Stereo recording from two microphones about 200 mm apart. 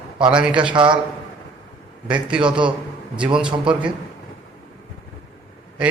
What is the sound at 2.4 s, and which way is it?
A man's voice, 25° right (ahead or behind).